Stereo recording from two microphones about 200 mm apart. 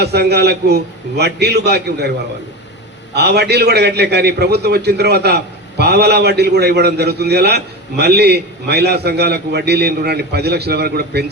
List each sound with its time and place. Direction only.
0.0 s a man's voice: 55° right (ahead or behind)
3.2 s a man's voice: 55° right (ahead or behind)